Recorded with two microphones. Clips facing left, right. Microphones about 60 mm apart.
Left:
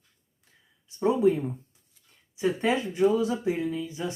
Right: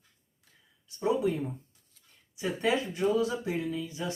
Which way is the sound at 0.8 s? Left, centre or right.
Left.